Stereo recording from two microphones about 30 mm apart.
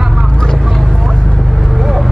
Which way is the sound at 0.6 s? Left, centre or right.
Centre.